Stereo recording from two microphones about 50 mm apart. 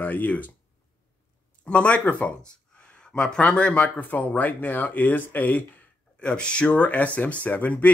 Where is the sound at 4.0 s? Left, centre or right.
Left.